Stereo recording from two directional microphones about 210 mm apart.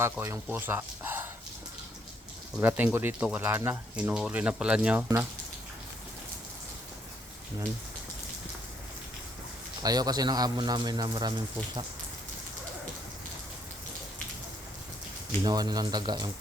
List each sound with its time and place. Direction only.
0.0 s speech: 10° right (ahead or behind)
2.6 s speech: 10° right (ahead or behind)
9.8 s speech: 20° right (ahead or behind)
15.4 s speech: 20° right (ahead or behind)